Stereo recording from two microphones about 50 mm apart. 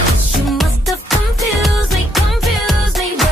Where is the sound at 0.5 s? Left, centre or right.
Centre.